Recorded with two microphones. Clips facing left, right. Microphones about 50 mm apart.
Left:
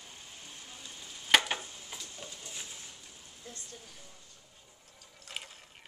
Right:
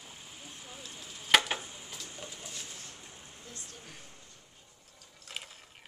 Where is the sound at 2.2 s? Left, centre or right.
Centre.